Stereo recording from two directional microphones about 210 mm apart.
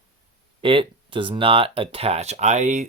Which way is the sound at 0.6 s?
25° right (ahead or behind).